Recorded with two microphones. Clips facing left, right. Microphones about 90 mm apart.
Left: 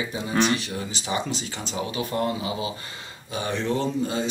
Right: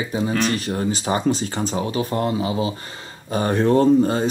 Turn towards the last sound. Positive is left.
turn(degrees=-45)  # may be behind; listen again after turning